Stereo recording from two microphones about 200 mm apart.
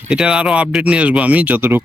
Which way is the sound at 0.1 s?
5° right (ahead or behind).